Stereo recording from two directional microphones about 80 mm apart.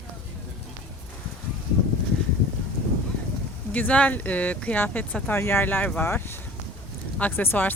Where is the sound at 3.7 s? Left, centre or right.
Centre.